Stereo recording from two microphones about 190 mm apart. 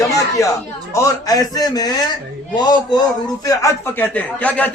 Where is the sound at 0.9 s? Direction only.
15° left (ahead or behind).